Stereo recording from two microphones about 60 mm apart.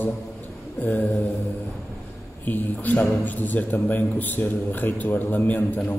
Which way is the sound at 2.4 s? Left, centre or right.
Left.